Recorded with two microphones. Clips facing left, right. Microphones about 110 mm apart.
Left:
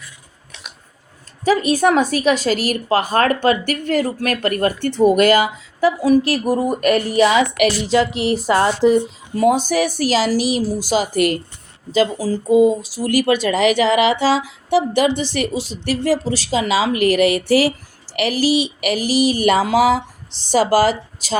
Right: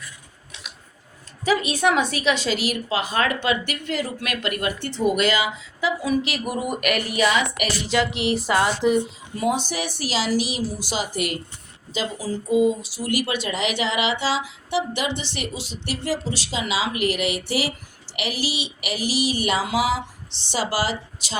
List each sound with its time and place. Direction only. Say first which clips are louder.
1.5 s speech: left 5 dB; 40° left (ahead or behind)
6.0 s music: left 9 dB; 40° left (ahead or behind)
7.9 s speech: left 5 dB; 35° left (ahead or behind)